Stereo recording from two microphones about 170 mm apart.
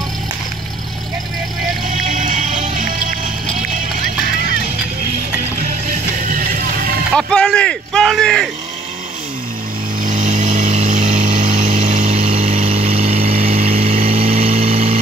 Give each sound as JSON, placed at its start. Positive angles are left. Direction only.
{"t": 1.9, "sound": "music", "side_deg": -50}
{"t": 7.2, "sound": "a sound", "side_deg": 5}
{"t": 10.0, "sound": "vehicle", "side_deg": -50}